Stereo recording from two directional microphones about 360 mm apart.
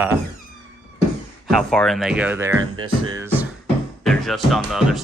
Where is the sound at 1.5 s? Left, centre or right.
Centre.